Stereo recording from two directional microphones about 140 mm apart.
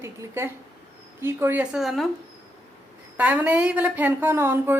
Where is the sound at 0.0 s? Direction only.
20° right (ahead or behind).